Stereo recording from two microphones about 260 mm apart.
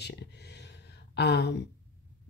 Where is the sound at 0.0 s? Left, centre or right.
Left.